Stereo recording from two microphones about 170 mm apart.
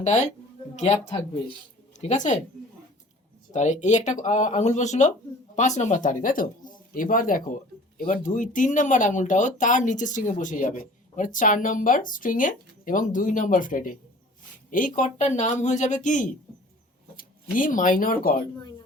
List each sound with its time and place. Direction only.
0.0 s speech: 45° left (ahead or behind)
2.0 s speech: 45° left (ahead or behind)
3.5 s speech: 45° left (ahead or behind)